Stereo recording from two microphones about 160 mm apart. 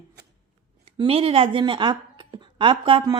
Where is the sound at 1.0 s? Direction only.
35° right (ahead or behind).